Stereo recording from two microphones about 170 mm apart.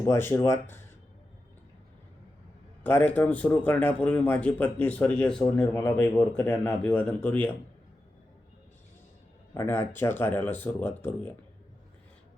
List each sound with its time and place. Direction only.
0.0 s speech: 15° left (ahead or behind)
2.8 s speech: 10° left (ahead or behind)
6.0 s speech: 20° left (ahead or behind)
6.5 s speech: 5° left (ahead or behind)
9.6 s speech: 15° left (ahead or behind)